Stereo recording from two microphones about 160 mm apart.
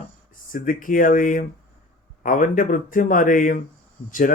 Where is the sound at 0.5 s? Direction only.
55° left (ahead or behind).